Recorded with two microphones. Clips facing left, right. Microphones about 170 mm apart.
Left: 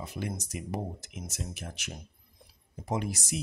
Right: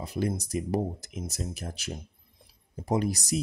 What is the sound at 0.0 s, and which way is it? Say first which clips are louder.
Speech: right 6 dB; 35° right (ahead or behind).